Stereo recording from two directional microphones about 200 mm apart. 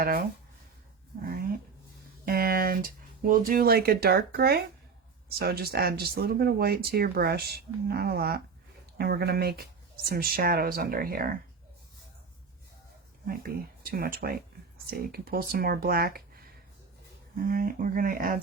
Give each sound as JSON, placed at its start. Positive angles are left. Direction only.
{"t": 0.0, "sound": "speech", "side_deg": -45}
{"t": 1.2, "sound": "a sound", "side_deg": -45}
{"t": 2.2, "sound": "speech", "side_deg": -50}
{"t": 13.2, "sound": "speech", "side_deg": -45}
{"t": 17.5, "sound": "speech", "side_deg": -45}